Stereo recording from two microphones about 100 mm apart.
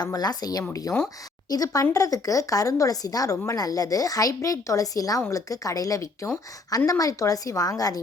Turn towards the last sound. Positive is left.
turn(degrees=40)  # may be behind; listen again after turning